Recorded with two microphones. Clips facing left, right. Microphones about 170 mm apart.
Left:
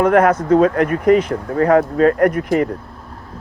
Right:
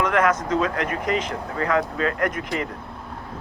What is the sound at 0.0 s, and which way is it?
Speech, 55° left (ahead or behind).